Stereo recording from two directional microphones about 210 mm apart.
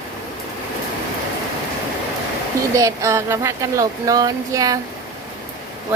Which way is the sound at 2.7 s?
15° right (ahead or behind).